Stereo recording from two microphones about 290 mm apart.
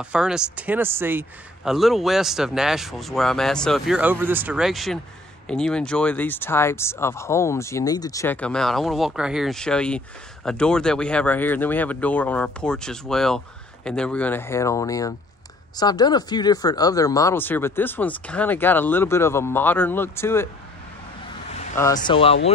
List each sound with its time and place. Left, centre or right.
0.0 s speech: centre
21.7 s speech: centre